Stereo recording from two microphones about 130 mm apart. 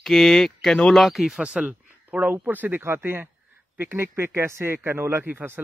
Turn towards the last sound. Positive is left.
turn(degrees=-15)  # may be behind; listen again after turning